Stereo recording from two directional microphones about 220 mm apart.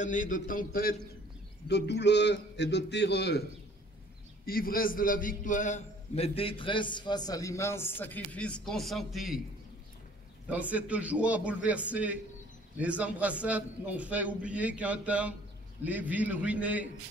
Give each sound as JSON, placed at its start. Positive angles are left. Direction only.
{"t": 0.0, "sound": "speech", "side_deg": 35}
{"t": 1.7, "sound": "a man's voice", "side_deg": 50}
{"t": 4.5, "sound": "a man's voice", "side_deg": 40}
{"t": 10.5, "sound": "a man's voice", "side_deg": -5}